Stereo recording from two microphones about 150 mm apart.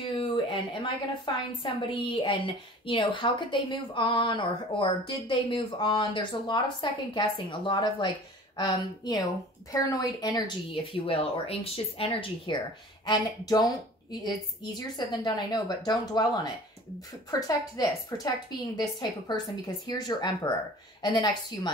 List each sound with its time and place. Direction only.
0.2 s a woman's voice: 35° left (ahead or behind)